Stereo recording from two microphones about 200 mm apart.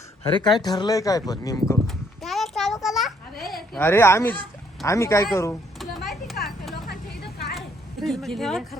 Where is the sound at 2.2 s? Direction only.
Centre (ahead or behind).